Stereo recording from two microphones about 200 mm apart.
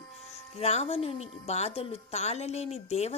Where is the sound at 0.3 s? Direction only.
30° left (ahead or behind).